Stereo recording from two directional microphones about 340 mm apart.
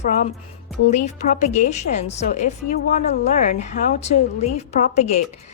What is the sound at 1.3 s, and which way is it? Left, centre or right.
A woman's voice, left.